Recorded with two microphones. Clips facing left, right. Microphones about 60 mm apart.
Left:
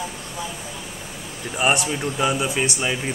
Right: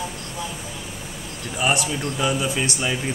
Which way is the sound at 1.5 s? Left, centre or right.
Left.